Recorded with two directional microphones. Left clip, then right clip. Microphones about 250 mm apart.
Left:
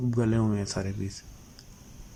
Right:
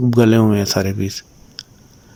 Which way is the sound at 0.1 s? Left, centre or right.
Right.